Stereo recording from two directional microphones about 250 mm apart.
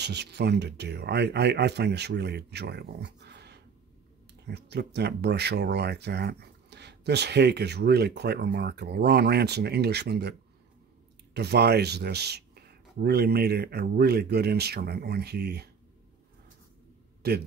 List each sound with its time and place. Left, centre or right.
0.0 s speech: right
11.3 s speech: right
17.2 s speech: right